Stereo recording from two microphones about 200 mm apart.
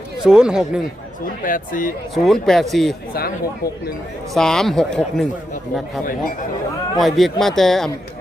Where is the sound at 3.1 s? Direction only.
50° left (ahead or behind).